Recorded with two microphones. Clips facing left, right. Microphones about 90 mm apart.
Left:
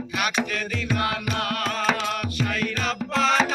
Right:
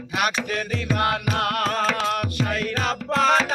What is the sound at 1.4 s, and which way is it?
Carnatic music, 50° right (ahead or behind).